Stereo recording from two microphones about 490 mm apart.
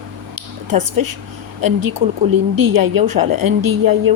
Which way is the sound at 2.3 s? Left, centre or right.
Right.